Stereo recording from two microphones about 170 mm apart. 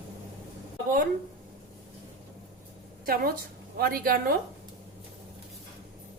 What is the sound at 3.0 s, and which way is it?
A woman's voice, 60° right (ahead or behind).